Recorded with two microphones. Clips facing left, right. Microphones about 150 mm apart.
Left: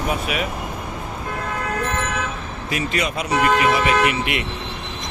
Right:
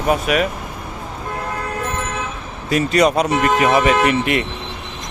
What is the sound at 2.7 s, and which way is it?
Speech, 40° right (ahead or behind).